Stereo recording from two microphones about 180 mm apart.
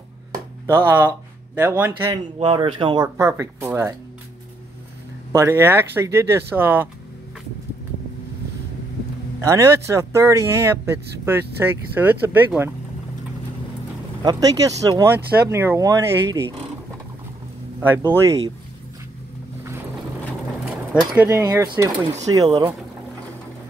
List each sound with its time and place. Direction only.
0.7 s speech: 10° right (ahead or behind)
2.3 s speech: 30° right (ahead or behind); by 3.9 s 10° right (ahead or behind)
5.3 s speech: 15° right (ahead or behind)
9.4 s speech: 15° right (ahead or behind)
14.2 s speech: 20° right (ahead or behind)
17.7 s speech: 15° right (ahead or behind)
21.1 s speech: 10° right (ahead or behind)